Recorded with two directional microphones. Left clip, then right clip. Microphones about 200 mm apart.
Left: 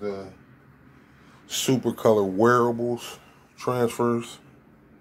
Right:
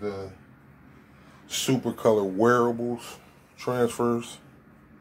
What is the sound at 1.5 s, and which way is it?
Speech, 50° left (ahead or behind).